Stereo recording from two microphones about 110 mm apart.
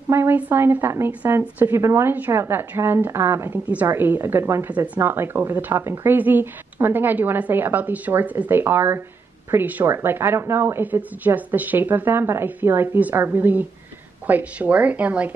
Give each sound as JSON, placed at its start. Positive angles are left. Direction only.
{"t": 0.1, "sound": "a woman's voice", "side_deg": -20}